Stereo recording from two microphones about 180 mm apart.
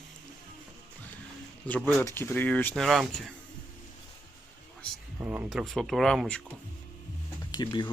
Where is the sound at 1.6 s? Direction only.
10° left (ahead or behind).